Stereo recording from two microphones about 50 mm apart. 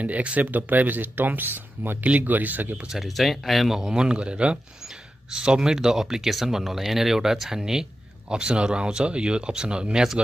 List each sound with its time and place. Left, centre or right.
0.0 s speech: right
2.9 s speech: centre
3.7 s speech: centre